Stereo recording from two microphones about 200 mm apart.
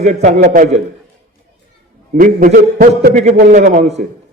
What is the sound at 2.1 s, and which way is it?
A man's voice, 40° right (ahead or behind).